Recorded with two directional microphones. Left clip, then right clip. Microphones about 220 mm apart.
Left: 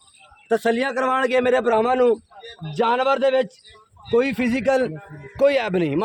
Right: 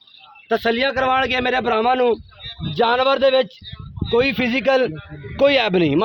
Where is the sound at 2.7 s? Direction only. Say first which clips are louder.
Right 3 dB; 30° right (ahead or behind).